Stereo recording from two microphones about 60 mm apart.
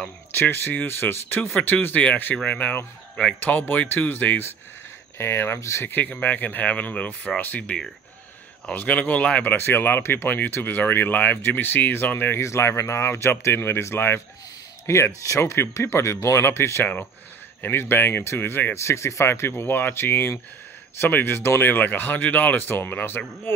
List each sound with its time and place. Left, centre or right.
0.3 s speech: left
2.3 s speech: left
5.1 s speech: left
5.9 s speech: left
9.6 s speech: left
12.4 s speech: left
18.8 s speech: left